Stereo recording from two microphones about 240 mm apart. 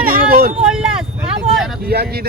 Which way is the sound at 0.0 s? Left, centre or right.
Right.